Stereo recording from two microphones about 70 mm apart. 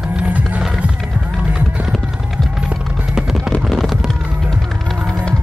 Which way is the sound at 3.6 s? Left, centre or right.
Centre.